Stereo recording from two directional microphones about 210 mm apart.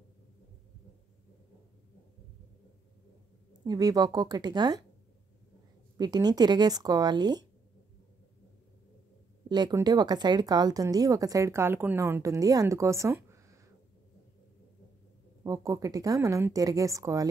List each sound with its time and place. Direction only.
3.6 s speech: 20° right (ahead or behind)
5.9 s speech: 20° right (ahead or behind)
9.5 s speech: 20° right (ahead or behind)
15.4 s speech: 15° right (ahead or behind)